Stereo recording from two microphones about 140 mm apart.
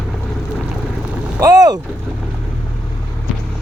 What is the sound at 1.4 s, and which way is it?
Boat, 25° right (ahead or behind).